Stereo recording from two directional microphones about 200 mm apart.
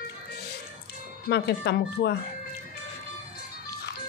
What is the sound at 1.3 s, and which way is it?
Speech, 55° left (ahead or behind).